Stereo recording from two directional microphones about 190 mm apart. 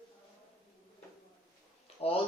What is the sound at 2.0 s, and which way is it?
Speech, 30° left (ahead or behind).